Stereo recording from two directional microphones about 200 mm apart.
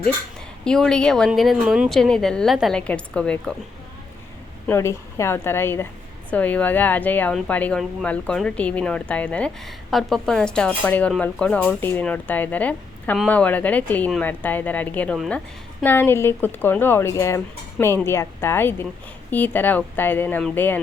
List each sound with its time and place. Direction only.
0.6 s speech: 5° left (ahead or behind)
4.6 s speech: 15° left (ahead or behind)